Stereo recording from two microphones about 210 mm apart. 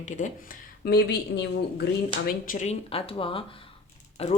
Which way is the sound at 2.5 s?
35° left (ahead or behind).